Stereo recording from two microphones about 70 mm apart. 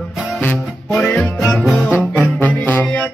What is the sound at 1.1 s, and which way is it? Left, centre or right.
Music, centre.